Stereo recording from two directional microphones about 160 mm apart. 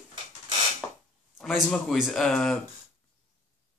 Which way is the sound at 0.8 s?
5° left (ahead or behind).